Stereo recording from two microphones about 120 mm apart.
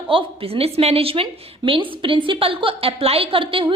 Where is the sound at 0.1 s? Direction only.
50° right (ahead or behind).